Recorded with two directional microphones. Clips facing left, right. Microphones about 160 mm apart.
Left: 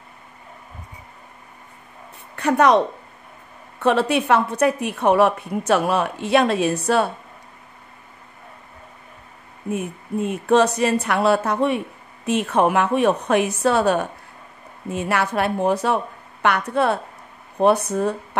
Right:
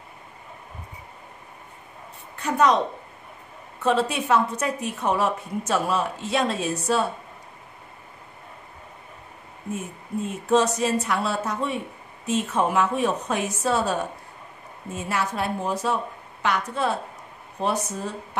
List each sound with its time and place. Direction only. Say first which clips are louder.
2.3 s a woman's voice: left 5 dB; 65° left (ahead or behind)
3.8 s a woman's voice: left 4 dB; 65° left (ahead or behind)
9.7 s a woman's voice: left 6 dB; 65° left (ahead or behind)